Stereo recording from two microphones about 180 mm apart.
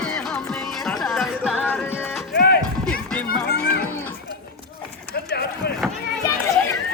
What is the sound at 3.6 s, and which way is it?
Cattle, 55° left (ahead or behind).